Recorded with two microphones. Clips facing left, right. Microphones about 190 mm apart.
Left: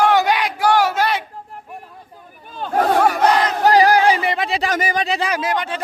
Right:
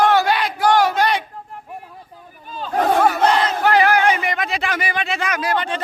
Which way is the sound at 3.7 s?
35° left (ahead or behind).